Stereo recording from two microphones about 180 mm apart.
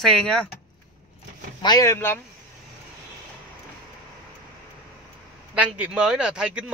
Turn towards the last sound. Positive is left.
turn(degrees=-5)  # may be behind; listen again after turning